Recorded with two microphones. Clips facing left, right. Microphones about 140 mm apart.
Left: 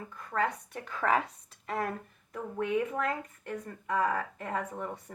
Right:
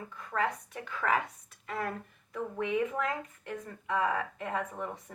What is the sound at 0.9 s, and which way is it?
Speech, 35° left (ahead or behind).